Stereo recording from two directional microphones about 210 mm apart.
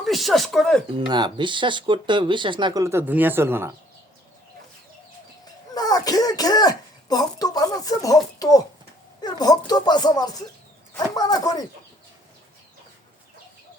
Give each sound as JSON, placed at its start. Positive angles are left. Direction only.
{"t": 0.0, "sound": "speech", "side_deg": 0}
{"t": 0.9, "sound": "speech", "side_deg": -20}
{"t": 5.7, "sound": "throat clearing", "side_deg": 20}
{"t": 9.2, "sound": "speech", "side_deg": 20}